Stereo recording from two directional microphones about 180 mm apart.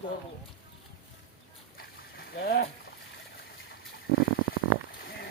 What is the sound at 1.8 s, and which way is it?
Splash, 55° left (ahead or behind).